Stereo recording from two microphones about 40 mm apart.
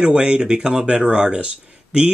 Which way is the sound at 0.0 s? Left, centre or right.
Right.